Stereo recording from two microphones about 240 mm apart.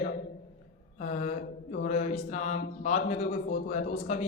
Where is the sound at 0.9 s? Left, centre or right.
Left.